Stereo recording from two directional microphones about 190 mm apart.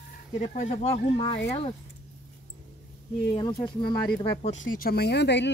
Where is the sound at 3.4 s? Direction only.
25° left (ahead or behind).